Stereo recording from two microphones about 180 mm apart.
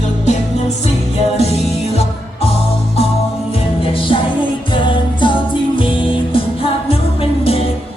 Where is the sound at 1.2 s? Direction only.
35° left (ahead or behind).